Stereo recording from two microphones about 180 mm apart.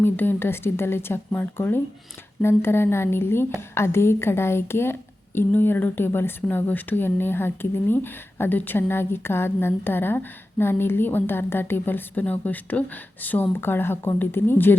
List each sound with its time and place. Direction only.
0.0 s a woman's voice: 10° left (ahead or behind)